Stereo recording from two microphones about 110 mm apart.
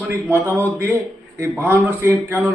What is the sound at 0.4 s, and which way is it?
A man's voice, 25° right (ahead or behind).